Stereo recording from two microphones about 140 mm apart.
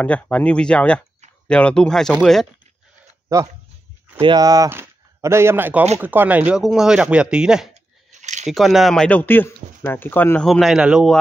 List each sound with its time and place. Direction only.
0.0 s speech: 10° left (ahead or behind)
3.3 s speech: 20° right (ahead or behind); by 7.7 s 5° right (ahead or behind)
7.7 s a sound: 55° right (ahead or behind)
8.5 s speech: centre (ahead or behind)
10.4 s a man's voice: centre (ahead or behind)